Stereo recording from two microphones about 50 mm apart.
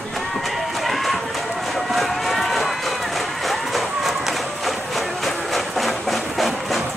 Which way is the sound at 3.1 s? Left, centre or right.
Centre.